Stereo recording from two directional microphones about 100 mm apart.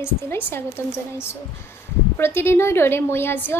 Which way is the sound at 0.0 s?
25° left (ahead or behind).